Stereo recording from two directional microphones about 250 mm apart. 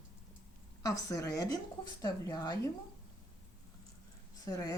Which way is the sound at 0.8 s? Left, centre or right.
Centre.